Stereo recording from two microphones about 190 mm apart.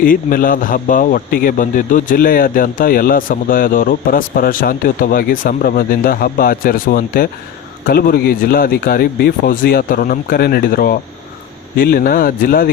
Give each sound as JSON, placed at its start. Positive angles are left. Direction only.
{"t": 0.0, "sound": "a man's voice", "side_deg": 50}